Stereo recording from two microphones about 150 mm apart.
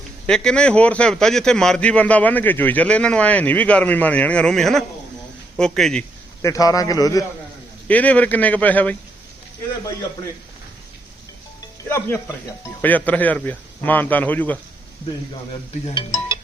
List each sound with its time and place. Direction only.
0.3 s a man's voice: 5° left (ahead or behind)
6.4 s a man's voice: 25° left (ahead or behind)
7.9 s a man's voice: 10° left (ahead or behind)
11.9 s a man's voice: 15° left (ahead or behind)